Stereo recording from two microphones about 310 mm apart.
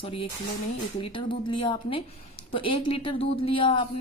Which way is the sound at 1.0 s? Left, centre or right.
Centre.